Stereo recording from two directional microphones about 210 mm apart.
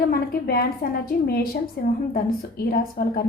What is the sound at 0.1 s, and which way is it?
A woman's voice, 45° left (ahead or behind).